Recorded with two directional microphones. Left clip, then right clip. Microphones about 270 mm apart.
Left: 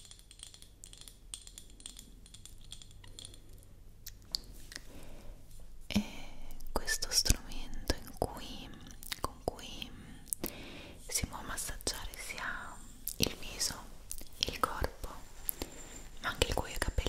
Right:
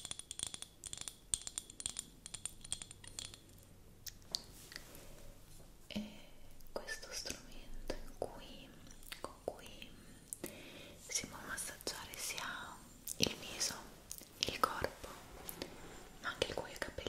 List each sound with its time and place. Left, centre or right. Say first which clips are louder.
2.4 s typing: right 4 dB; centre
4.0 s a sound: left 3 dB; left
5.9 s whispering: left 10 dB; left
12.4 s whispering: left 4 dB; centre
15.6 s a sound: left 4 dB; left
16.2 s whispering: left 6 dB; left